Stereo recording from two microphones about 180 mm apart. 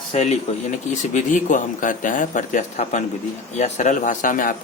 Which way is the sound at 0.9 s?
45° left (ahead or behind).